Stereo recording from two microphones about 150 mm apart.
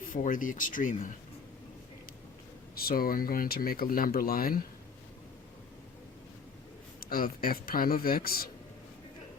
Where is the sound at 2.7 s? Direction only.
80° left.